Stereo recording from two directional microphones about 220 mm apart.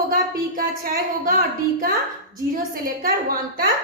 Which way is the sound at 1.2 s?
40° right (ahead or behind).